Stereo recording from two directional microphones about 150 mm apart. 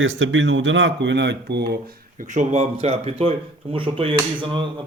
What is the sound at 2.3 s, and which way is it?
Speech, 50° right (ahead or behind).